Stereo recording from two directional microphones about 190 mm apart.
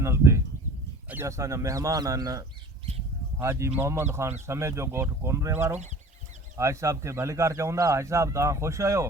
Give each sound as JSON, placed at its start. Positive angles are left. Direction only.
{"t": 0.0, "sound": "speech", "side_deg": -15}